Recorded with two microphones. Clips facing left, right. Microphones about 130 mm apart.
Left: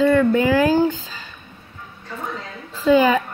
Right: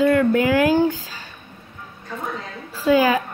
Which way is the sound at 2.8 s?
5° right (ahead or behind).